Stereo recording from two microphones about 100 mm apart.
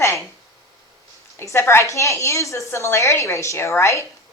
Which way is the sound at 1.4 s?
25° left (ahead or behind).